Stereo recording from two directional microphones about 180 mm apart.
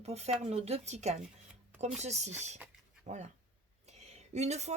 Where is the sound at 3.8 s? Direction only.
40° right (ahead or behind).